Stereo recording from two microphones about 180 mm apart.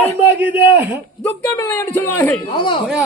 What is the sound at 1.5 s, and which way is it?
Speech, 15° left (ahead or behind).